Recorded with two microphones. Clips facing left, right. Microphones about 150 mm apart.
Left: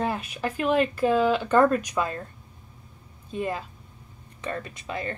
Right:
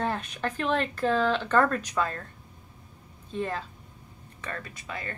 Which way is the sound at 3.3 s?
15° left (ahead or behind).